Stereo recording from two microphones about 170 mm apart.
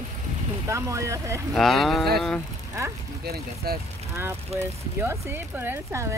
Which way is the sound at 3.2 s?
65° right (ahead or behind).